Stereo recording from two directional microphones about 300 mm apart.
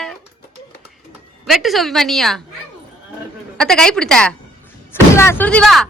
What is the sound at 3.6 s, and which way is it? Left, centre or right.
Speech, centre.